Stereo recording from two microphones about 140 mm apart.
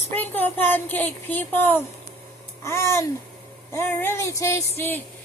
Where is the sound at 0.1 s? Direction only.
15° left (ahead or behind).